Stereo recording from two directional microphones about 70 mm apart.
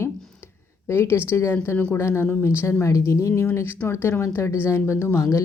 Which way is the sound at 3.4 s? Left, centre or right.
Left.